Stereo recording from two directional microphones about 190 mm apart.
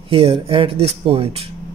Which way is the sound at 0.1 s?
30° right (ahead or behind).